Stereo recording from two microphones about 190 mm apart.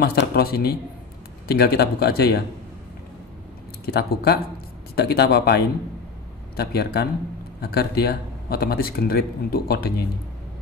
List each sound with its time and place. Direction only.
0.0 s speech: 55° left (ahead or behind)
3.8 s speech: 55° left (ahead or behind)